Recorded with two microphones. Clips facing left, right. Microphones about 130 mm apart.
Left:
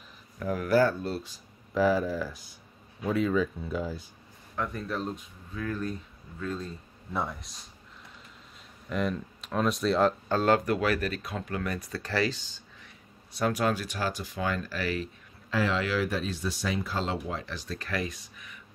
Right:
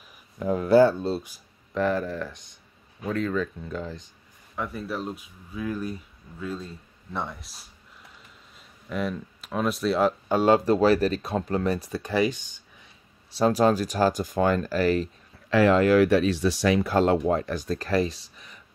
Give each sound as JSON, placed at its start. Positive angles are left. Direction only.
{"t": 0.4, "sound": "speech", "side_deg": -25}
{"t": 1.7, "sound": "speech", "side_deg": 5}
{"t": 4.6, "sound": "speech", "side_deg": -5}
{"t": 8.8, "sound": "speech", "side_deg": 0}
{"t": 10.2, "sound": "speech", "side_deg": -20}
{"t": 11.9, "sound": "speech", "side_deg": -20}
{"t": 13.4, "sound": "speech", "side_deg": -35}
{"t": 15.5, "sound": "speech", "side_deg": -55}